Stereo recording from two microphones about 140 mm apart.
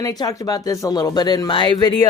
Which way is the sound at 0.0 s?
25° left (ahead or behind).